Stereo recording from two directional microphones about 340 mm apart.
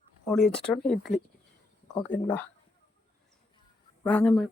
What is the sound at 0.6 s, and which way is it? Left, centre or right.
Speech, centre.